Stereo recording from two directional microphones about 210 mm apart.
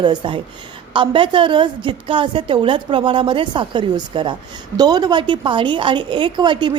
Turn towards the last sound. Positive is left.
turn(degrees=-20)  # may be behind; listen again after turning